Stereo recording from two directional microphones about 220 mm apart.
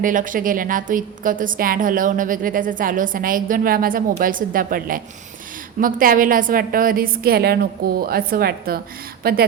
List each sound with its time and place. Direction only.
0.0 s a woman's voice: 35° right (ahead or behind)